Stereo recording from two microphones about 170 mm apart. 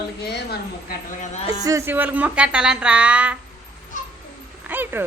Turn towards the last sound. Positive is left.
turn(degrees=-10)  # may be behind; listen again after turning